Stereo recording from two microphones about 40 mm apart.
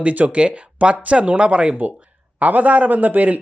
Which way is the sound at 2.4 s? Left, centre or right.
Right.